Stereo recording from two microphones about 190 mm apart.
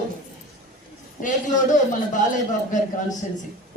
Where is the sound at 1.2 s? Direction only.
40° left (ahead or behind).